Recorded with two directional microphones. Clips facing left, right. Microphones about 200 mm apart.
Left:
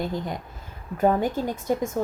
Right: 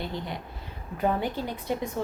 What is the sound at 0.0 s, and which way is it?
A woman's voice, 45° left (ahead or behind).